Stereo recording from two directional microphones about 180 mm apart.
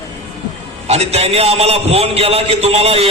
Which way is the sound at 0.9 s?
35° right (ahead or behind).